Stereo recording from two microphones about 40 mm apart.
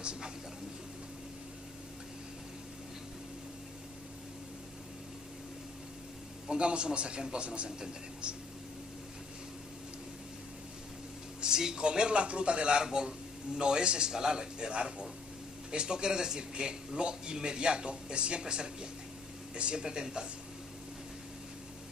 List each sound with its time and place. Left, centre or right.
0.0 s a sound: right
6.5 s speech: right
11.4 s speech: centre